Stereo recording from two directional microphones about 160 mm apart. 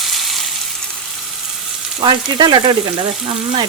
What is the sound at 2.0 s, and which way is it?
Speech, 30° right (ahead or behind).